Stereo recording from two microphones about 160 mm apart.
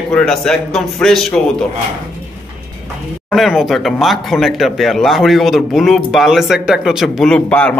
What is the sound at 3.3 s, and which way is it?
Speech, centre (ahead or behind).